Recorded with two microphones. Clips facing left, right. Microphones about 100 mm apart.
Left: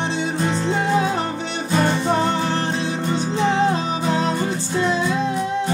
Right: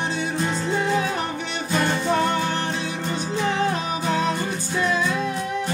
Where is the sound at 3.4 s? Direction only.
25° left (ahead or behind).